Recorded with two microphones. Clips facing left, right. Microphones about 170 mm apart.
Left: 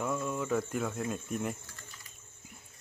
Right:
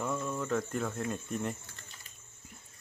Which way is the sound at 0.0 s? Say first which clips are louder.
Left 1 dB; 5° left (ahead or behind).